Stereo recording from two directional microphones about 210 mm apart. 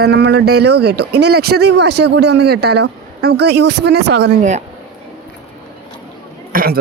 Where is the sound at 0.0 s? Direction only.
50° right (ahead or behind).